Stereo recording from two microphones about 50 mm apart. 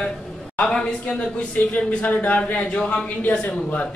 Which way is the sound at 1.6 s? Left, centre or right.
Left.